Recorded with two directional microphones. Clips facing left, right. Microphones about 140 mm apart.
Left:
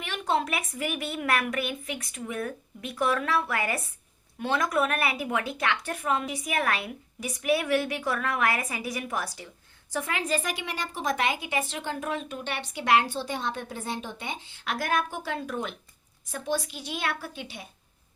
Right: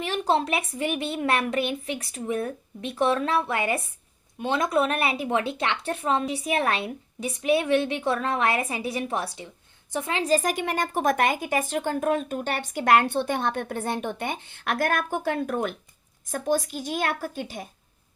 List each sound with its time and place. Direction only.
0.0 s a woman's voice: 35° right (ahead or behind)